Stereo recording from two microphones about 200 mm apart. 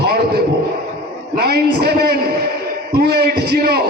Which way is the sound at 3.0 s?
55° right (ahead or behind).